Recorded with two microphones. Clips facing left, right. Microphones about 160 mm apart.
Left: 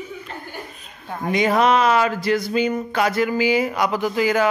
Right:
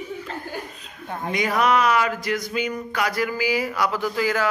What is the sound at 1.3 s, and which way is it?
Speech, 25° left (ahead or behind).